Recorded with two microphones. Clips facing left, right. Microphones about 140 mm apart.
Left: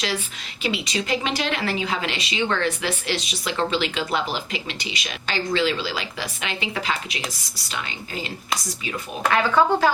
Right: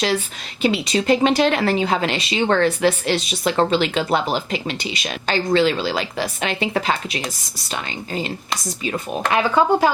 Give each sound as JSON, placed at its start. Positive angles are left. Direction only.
{"t": 0.6, "sound": "a woman's voice", "side_deg": -40}
{"t": 9.3, "sound": "speech", "side_deg": -15}